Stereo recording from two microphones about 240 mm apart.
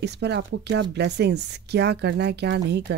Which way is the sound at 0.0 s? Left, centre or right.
Right.